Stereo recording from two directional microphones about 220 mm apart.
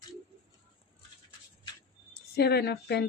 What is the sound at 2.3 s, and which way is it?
Speech, 45° left (ahead or behind).